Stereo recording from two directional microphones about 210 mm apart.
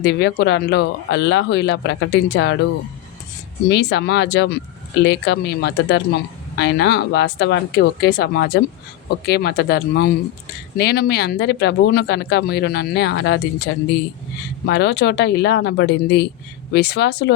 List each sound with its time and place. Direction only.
0.0 s speech: 50° left (ahead or behind)
3.7 s speech: 55° left (ahead or behind)